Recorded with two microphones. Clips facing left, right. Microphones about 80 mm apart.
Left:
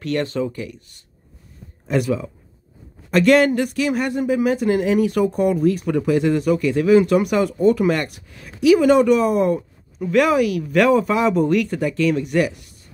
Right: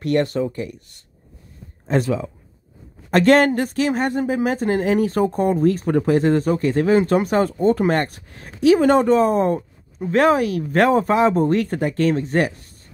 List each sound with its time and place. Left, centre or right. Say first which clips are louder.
0.0 s speech: right 3 dB; right
1.9 s speech: even; right
3.1 s speech: even; right